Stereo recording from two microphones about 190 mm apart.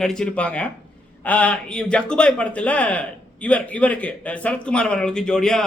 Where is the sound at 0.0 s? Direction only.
5° left (ahead or behind).